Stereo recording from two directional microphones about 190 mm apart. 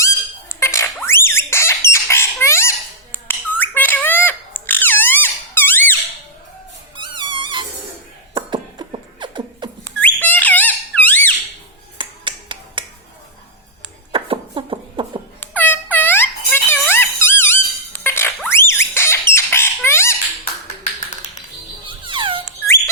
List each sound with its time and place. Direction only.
0.0 s a sound: 15° left (ahead or behind)
6.9 s music: 25° right (ahead or behind)
8.3 s beatboxing: 30° right (ahead or behind)
9.8 s squeak: 10° left (ahead or behind)
11.9 s finger snapping: 25° right (ahead or behind)
14.1 s a sound: 25° right (ahead or behind)
15.4 s music: 10° left (ahead or behind)
18.5 s a sound: 15° left (ahead or behind)
21.8 s music: 25° right (ahead or behind)